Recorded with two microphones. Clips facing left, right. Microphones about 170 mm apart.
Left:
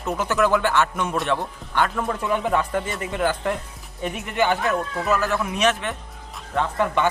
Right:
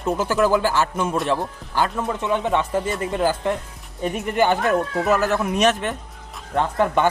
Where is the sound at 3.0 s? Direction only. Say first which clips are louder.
Right 2 dB; 35° right (ahead or behind).